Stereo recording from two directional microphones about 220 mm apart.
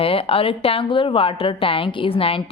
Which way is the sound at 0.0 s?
25° left (ahead or behind).